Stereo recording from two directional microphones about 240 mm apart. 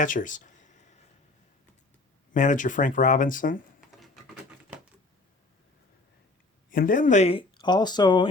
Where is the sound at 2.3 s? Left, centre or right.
Left.